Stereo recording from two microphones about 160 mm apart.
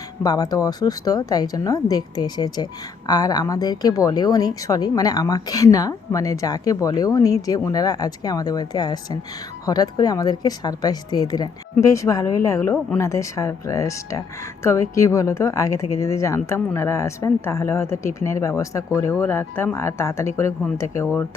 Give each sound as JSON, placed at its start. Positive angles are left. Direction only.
{"t": 0.2, "sound": "speech", "side_deg": 25}